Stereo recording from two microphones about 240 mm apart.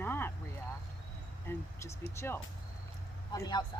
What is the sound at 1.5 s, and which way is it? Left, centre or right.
Speech, centre.